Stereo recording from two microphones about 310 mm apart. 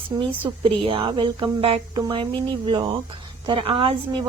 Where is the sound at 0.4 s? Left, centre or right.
Centre.